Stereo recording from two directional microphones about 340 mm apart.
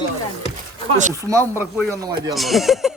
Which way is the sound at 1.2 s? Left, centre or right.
Centre.